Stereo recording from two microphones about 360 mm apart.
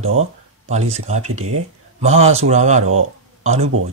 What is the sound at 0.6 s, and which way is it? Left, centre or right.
Speech, centre.